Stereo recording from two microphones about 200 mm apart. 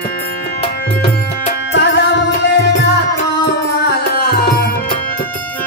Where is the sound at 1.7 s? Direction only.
60° left (ahead or behind).